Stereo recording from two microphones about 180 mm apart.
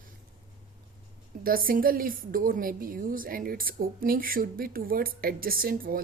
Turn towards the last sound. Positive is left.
turn(degrees=-55)  # may be behind; listen again after turning